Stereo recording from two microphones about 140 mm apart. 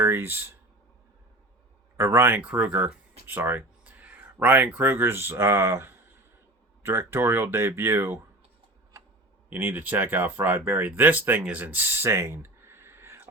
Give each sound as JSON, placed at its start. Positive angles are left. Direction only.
{"t": 0.0, "sound": "speech", "side_deg": -15}
{"t": 2.0, "sound": "speech", "side_deg": -15}
{"t": 9.5, "sound": "speech", "side_deg": -15}